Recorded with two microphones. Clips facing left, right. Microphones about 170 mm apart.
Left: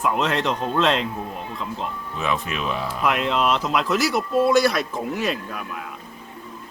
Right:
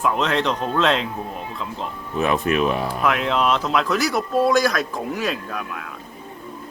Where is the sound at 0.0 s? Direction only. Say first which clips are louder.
Right 1 dB; 5° left (ahead or behind).